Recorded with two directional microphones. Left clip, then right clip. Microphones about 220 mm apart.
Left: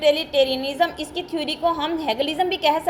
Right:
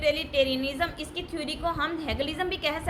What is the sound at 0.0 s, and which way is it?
A child's voice, 10° left (ahead or behind).